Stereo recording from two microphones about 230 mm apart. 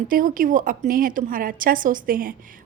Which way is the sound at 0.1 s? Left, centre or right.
Right.